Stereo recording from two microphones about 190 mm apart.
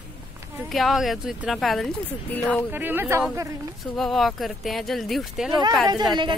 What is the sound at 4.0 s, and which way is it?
Speech, centre (ahead or behind).